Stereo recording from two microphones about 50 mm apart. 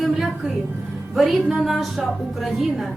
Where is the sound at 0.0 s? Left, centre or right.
Centre.